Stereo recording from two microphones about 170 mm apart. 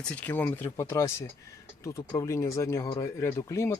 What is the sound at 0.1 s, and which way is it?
Speech, 10° left (ahead or behind).